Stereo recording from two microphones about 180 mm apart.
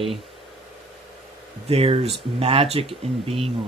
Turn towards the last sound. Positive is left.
turn(degrees=-35)  # may be behind; listen again after turning